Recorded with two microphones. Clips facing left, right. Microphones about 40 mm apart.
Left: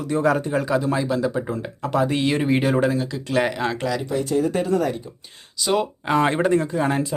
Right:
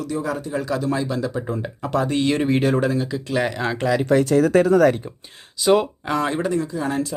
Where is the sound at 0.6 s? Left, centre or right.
Centre.